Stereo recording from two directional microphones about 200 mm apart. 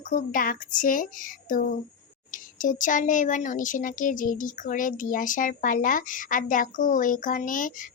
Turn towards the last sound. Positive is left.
turn(degrees=40)  # may be behind; listen again after turning